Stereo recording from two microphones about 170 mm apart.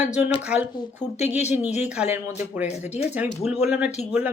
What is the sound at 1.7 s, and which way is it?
Speech, 40° left (ahead or behind).